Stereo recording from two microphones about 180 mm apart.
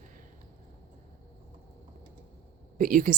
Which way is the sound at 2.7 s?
50° right (ahead or behind).